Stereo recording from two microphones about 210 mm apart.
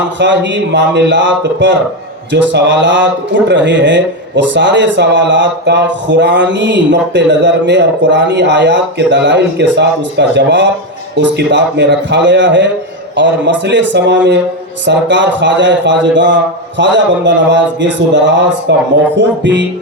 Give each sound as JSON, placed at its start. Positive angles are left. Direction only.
{"t": 0.2, "sound": "a man's voice", "side_deg": -55}